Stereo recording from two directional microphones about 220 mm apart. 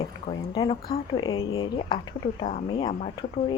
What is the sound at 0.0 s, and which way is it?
Speech, 25° left (ahead or behind).